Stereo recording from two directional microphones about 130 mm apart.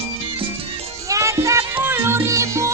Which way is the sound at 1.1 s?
20° right (ahead or behind).